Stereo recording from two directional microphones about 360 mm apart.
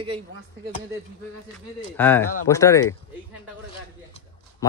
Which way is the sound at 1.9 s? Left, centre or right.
Centre.